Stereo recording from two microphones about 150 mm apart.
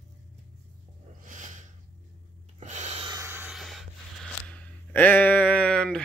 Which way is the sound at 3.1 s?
20° right (ahead or behind).